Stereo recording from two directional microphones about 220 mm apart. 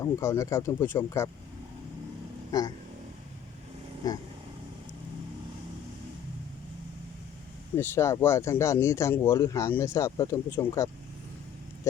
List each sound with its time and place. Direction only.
0.0 s speech: 15° left (ahead or behind)
2.5 s speech: 15° left (ahead or behind)
4.0 s speech: 15° left (ahead or behind)
7.8 s speech: 10° left (ahead or behind)